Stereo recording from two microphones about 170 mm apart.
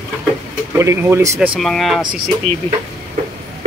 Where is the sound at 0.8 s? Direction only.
15° right (ahead or behind).